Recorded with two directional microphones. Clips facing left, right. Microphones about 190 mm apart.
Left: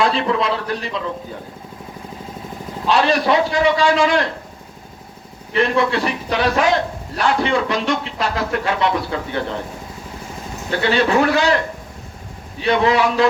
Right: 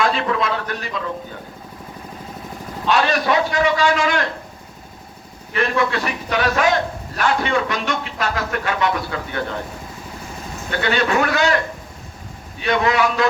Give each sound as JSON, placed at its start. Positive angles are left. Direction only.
{"t": 0.0, "sound": "a man's voice", "side_deg": 30}
{"t": 2.8, "sound": "speech", "side_deg": 30}
{"t": 5.5, "sound": "speech", "side_deg": 30}
{"t": 10.7, "sound": "speech", "side_deg": 30}
{"t": 12.5, "sound": "speech", "side_deg": 30}